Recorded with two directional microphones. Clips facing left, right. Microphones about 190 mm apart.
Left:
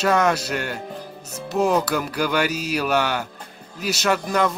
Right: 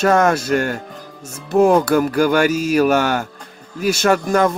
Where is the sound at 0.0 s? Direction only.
50° right (ahead or behind).